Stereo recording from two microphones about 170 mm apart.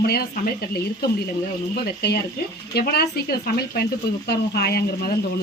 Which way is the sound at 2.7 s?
70° left (ahead or behind).